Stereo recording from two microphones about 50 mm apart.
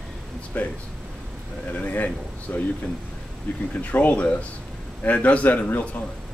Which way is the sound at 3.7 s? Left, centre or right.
Left.